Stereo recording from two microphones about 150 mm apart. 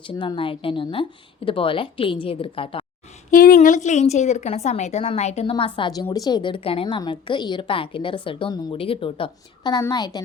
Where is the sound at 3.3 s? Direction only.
70° left (ahead or behind).